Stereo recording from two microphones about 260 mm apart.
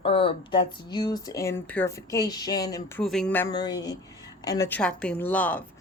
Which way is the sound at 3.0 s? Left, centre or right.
Centre.